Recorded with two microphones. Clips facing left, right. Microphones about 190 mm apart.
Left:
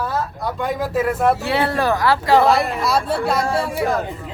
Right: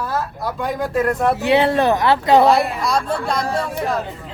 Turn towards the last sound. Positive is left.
turn(degrees=5)  # may be behind; listen again after turning